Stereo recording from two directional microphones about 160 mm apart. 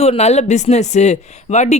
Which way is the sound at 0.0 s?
40° left (ahead or behind).